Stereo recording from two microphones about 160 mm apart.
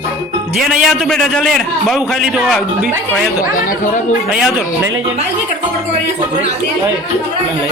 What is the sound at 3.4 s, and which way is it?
Speech, 60° left (ahead or behind).